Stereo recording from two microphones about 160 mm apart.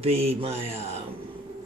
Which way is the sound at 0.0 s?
40° right (ahead or behind).